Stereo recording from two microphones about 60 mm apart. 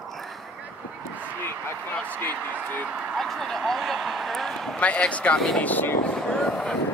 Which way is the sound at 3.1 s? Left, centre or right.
Centre.